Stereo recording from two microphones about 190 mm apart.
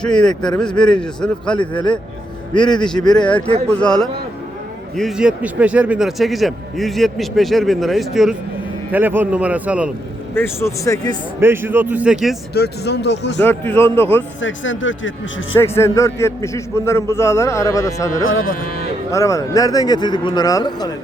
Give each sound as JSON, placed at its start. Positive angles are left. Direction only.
{"t": 0.0, "sound": "a man's voice", "side_deg": 5}
{"t": 1.5, "sound": "speech", "side_deg": 25}
{"t": 3.0, "sound": "speech", "side_deg": 20}
{"t": 3.7, "sound": "a man's voice", "side_deg": 5}
{"t": 10.3, "sound": "a man's voice", "side_deg": 15}
{"t": 11.3, "sound": "speech", "side_deg": -10}
{"t": 12.5, "sound": "speech", "side_deg": 60}
{"t": 13.4, "sound": "a man's voice", "side_deg": 10}
{"t": 14.4, "sound": "speech", "side_deg": 80}
{"t": 15.5, "sound": "a man's voice", "side_deg": 15}
{"t": 18.4, "sound": "speech", "side_deg": 50}
{"t": 19.1, "sound": "speech", "side_deg": 15}